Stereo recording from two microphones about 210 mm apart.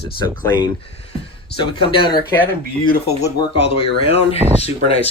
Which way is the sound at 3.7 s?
30° left (ahead or behind).